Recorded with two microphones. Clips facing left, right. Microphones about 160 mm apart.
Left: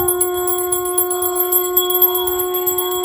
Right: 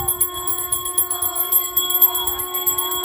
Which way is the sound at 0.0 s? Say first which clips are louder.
Left 14 dB; 65° left (ahead or behind).